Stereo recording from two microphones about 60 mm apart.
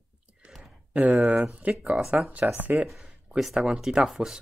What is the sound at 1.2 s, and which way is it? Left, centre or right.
Speech, centre.